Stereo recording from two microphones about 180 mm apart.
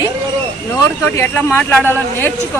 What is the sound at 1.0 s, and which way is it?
Speech, 15° left (ahead or behind).